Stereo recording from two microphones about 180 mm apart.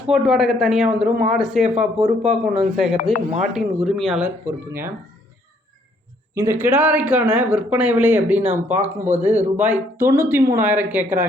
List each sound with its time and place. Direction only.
0.1 s speech: centre (ahead or behind)
1.1 s speech: 45° right (ahead or behind)
1.4 s speech: 5° right (ahead or behind)
1.8 s speech: 40° right (ahead or behind)
2.2 s speech: centre (ahead or behind)
4.4 s speech: 10° right (ahead or behind)
6.3 s speech: 15° right (ahead or behind)